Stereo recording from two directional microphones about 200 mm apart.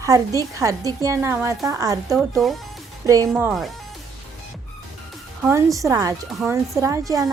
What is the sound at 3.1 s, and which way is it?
Speech, 15° right (ahead or behind).